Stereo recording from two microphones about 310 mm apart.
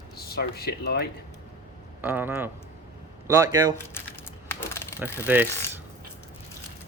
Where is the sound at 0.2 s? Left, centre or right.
Left.